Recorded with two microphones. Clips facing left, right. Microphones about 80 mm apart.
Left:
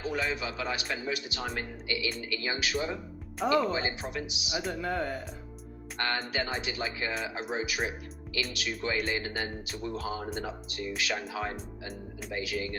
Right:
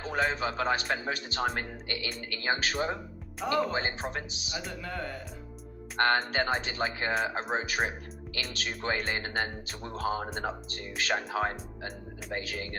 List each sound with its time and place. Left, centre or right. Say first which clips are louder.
0.0 s speech: right 3 dB; right
4.8 s speech: left 7 dB; centre
6.0 s speech: right 5 dB; right